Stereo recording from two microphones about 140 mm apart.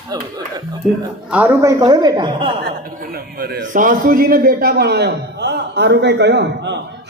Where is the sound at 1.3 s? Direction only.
15° right (ahead or behind).